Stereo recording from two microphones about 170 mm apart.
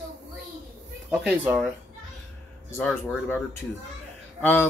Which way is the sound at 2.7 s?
Centre (ahead or behind).